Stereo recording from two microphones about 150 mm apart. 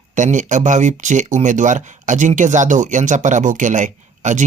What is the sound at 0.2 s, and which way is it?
Speech, 55° right (ahead or behind).